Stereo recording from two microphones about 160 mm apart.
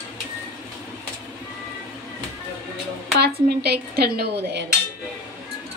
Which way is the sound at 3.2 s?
90° right.